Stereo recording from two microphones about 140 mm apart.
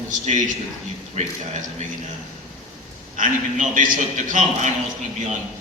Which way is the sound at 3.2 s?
70° right (ahead or behind).